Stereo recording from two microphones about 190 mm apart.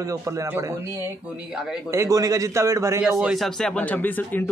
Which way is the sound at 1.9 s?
15° right (ahead or behind).